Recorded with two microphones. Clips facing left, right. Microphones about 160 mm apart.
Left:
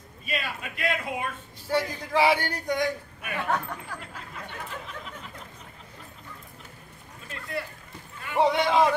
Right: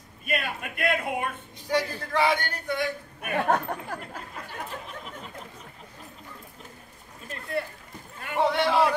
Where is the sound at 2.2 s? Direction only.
10° left (ahead or behind).